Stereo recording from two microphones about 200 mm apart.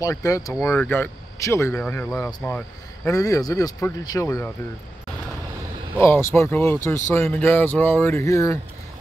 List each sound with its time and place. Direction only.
0.0 s speech: 15° left (ahead or behind)
5.9 s speech: 10° left (ahead or behind)